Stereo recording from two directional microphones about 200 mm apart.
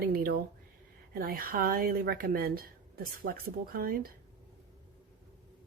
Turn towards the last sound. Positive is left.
turn(degrees=-45)  # may be behind; listen again after turning